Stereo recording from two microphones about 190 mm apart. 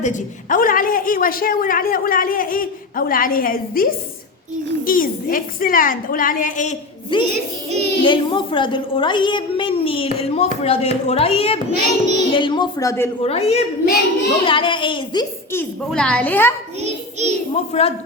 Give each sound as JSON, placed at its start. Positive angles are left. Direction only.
{"t": 0.0, "sound": "a woman's voice", "side_deg": 40}
{"t": 7.1, "sound": "a child's voice", "side_deg": 25}
{"t": 13.2, "sound": "a woman's voice", "side_deg": 35}
{"t": 13.8, "sound": "a child's voice", "side_deg": 55}
{"t": 14.4, "sound": "a child's voice", "side_deg": 25}
{"t": 15.5, "sound": "a woman's voice", "side_deg": 5}
{"t": 16.8, "sound": "child singing", "side_deg": -35}
{"t": 17.5, "sound": "a woman's voice", "side_deg": 30}